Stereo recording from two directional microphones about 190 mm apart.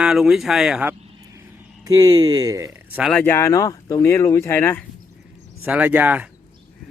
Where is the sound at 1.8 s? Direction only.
20° right (ahead or behind).